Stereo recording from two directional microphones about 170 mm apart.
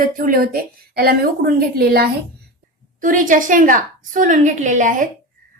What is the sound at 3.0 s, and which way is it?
A woman's voice, 50° right (ahead or behind).